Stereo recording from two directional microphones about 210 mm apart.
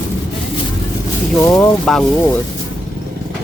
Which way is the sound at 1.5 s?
10° left (ahead or behind).